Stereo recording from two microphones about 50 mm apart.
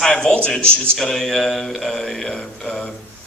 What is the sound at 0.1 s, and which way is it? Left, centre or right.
Speech, centre.